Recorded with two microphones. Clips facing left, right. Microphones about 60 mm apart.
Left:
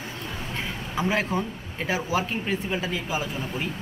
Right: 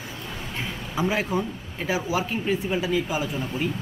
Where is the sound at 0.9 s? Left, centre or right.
Centre.